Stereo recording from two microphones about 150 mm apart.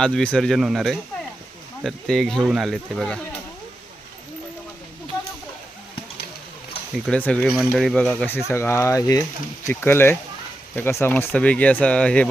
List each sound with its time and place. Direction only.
0.0 s speech: 5° left (ahead or behind)
6.9 s speech: 5° left (ahead or behind)
8.4 s speech: 15° left (ahead or behind)